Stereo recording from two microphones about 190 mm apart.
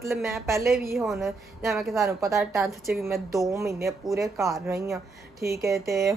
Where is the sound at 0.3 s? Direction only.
15° right (ahead or behind).